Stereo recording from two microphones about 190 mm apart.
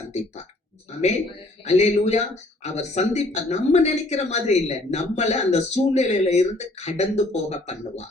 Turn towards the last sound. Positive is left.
turn(degrees=35)  # may be behind; listen again after turning